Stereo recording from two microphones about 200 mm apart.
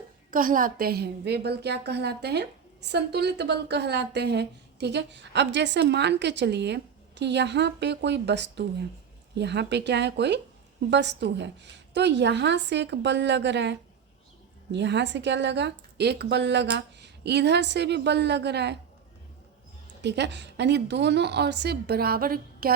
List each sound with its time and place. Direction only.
0.3 s a woman's voice: 40° right (ahead or behind)
20.0 s a woman's voice: 60° right (ahead or behind)